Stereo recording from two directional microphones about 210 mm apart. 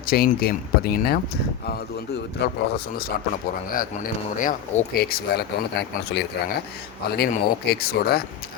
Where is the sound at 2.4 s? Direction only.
50° left (ahead or behind).